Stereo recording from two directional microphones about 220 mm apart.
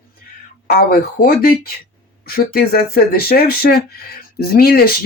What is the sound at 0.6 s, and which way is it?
Speech, 45° left (ahead or behind).